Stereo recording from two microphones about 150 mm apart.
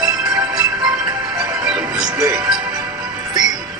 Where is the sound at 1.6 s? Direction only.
5° right (ahead or behind).